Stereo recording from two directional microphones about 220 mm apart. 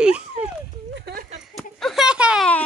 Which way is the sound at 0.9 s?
50° right (ahead or behind).